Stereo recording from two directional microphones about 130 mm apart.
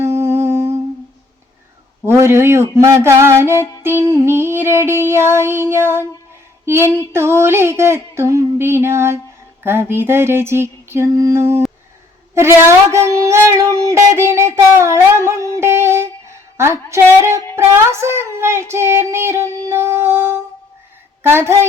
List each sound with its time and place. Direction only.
0.0 s humming: 20° right (ahead or behind)
2.0 s child singing: 20° right (ahead or behind)
15.5 s music: 20° right (ahead or behind)
17.6 s child singing: 20° right (ahead or behind)